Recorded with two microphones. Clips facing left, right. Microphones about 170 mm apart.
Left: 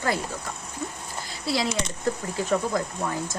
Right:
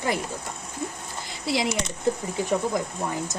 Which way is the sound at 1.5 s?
20° right (ahead or behind).